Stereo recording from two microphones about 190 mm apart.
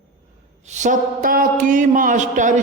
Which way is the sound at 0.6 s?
40° right (ahead or behind).